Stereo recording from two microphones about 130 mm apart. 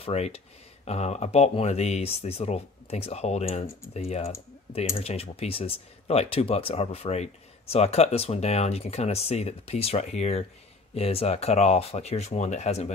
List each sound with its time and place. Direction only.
0.0 s speech: 55° left (ahead or behind)